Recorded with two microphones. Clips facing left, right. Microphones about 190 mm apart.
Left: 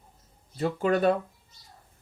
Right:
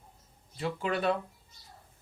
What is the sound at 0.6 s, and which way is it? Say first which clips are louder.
Speech: left 7 dB; 45° left (ahead or behind).